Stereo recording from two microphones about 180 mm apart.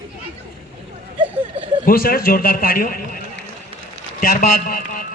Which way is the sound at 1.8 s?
55° left (ahead or behind).